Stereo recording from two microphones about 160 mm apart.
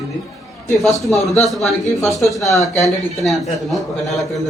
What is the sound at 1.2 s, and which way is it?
A man's voice, centre (ahead or behind).